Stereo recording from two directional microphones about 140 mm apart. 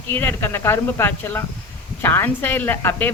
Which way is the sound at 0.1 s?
15° left (ahead or behind).